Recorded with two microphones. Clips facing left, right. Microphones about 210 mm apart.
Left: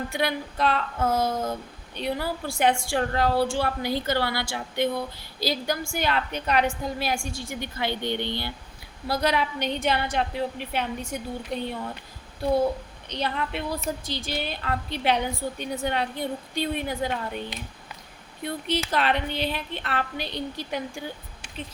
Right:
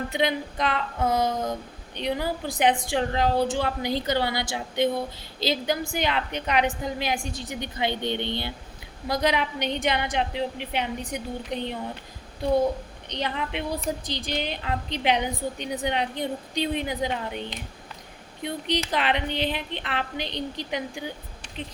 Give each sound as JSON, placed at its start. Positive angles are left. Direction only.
{"t": 0.1, "sound": "a woman's voice", "side_deg": -20}
{"t": 13.1, "sound": "a woman's voice", "side_deg": -15}
{"t": 18.4, "sound": "a woman's voice", "side_deg": -15}